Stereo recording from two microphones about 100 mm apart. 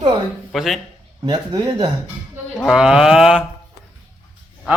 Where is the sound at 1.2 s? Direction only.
40° right (ahead or behind).